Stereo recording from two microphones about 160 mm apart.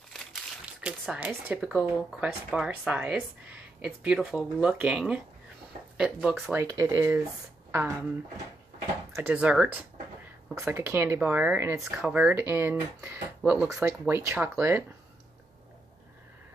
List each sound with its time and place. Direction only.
0.8 s speech: 5° right (ahead or behind)
9.1 s speech: 10° right (ahead or behind)